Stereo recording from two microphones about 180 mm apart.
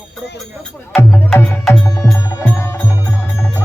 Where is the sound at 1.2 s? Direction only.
10° left (ahead or behind).